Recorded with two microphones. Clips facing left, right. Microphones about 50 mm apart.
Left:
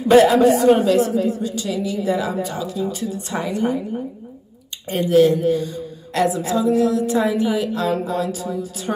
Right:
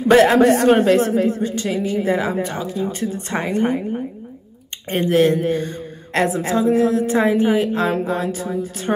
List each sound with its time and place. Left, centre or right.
0.1 s speech: right
4.8 s speech: right